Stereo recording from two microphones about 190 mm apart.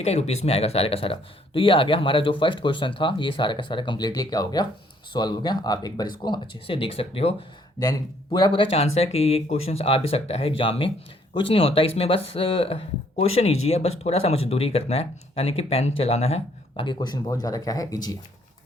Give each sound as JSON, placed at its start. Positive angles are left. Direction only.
{"t": 0.0, "sound": "speech", "side_deg": 35}
{"t": 7.8, "sound": "speech", "side_deg": 20}